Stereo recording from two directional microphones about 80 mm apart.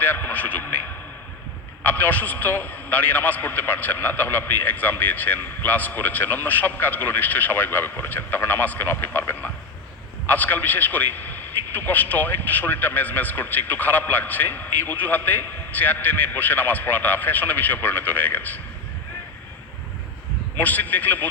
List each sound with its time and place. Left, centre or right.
0.0 s a man's voice: left
1.8 s a man's voice: left
20.6 s a man's voice: left